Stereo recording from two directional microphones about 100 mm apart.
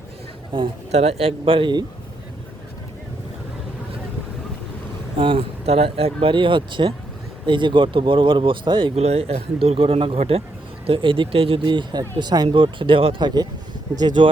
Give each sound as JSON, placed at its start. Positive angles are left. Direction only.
{"t": 0.5, "sound": "speech", "side_deg": -55}
{"t": 0.9, "sound": "speech", "side_deg": -90}
{"t": 5.1, "sound": "speech", "side_deg": -60}
{"t": 6.3, "sound": "speech", "side_deg": -55}
{"t": 9.0, "sound": "speech", "side_deg": -90}
{"t": 10.8, "sound": "speech", "side_deg": -65}
{"t": 12.5, "sound": "speech", "side_deg": -55}
{"t": 13.1, "sound": "speech", "side_deg": -45}